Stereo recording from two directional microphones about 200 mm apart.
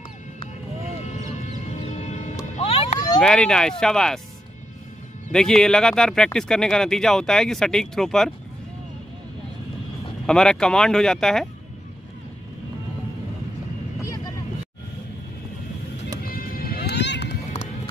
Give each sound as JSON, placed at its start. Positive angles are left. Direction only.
{"t": 1.7, "sound": "music", "side_deg": 35}
{"t": 2.5, "sound": "a sound", "side_deg": 30}
{"t": 3.2, "sound": "speech", "side_deg": 5}
{"t": 5.3, "sound": "speech", "side_deg": 0}
{"t": 10.2, "sound": "speech", "side_deg": 5}
{"t": 14.0, "sound": "vehicle", "side_deg": 15}
{"t": 16.2, "sound": "music", "side_deg": 45}